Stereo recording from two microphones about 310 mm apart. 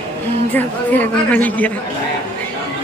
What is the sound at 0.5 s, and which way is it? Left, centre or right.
A man's voice, centre.